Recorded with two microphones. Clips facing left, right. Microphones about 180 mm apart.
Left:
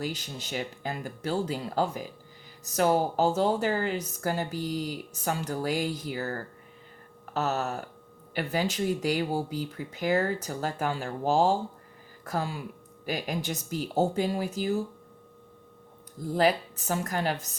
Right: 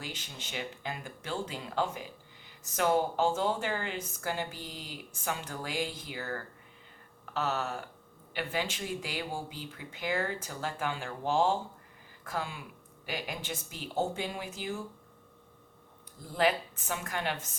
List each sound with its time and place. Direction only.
0.0 s a woman's voice: 40° left (ahead or behind)
16.3 s a woman's voice: 40° left (ahead or behind)